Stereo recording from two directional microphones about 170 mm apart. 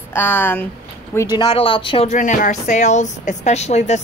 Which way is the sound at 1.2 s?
25° left (ahead or behind).